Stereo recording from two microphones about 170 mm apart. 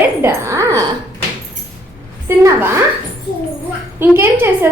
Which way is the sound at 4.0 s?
15° right (ahead or behind).